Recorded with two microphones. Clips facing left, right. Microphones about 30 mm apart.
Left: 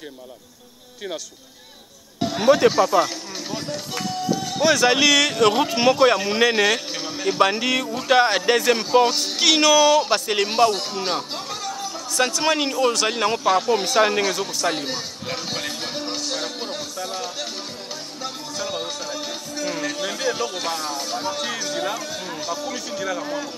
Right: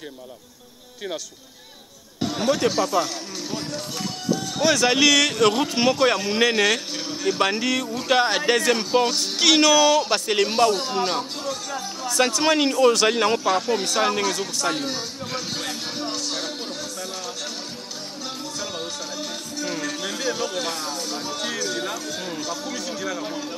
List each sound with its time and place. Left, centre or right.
2.3 s speech: centre
4.6 s speech: centre
6.9 s a sound: left
7.3 s speech: centre
12.2 s speech: centre
13.4 s speech: centre
15.8 s music: centre
16.3 s a sound: centre
18.6 s music: centre
19.6 s speech: centre